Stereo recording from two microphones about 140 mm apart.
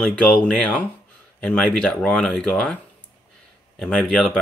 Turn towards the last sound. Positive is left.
turn(degrees=5)  # may be behind; listen again after turning